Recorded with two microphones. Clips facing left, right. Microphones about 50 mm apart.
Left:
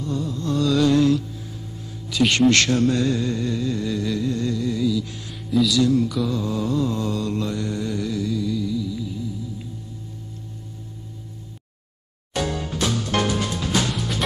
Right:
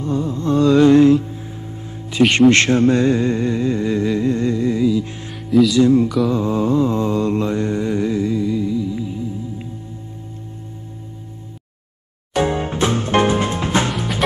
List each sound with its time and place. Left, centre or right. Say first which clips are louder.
0.0 s music: right 6 dB; right
2.0 s a man's voice: right 5 dB; right
2.5 s music: right 5 dB; right
6.3 s mantra: right 6 dB; right
12.4 s music: right 7 dB; right